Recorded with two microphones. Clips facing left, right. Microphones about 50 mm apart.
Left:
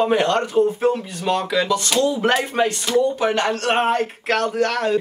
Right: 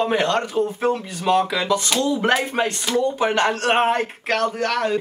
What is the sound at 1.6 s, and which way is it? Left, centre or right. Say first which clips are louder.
Speech: even; centre.